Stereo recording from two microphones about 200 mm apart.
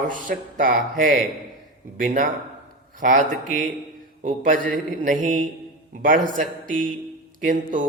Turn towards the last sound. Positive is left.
turn(degrees=-45)  # may be behind; listen again after turning